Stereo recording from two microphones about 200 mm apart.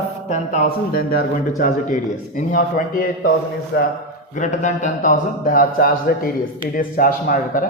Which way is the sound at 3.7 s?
55° left (ahead or behind).